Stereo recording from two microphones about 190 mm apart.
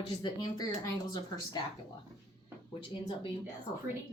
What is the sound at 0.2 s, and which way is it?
Speech, 20° left (ahead or behind).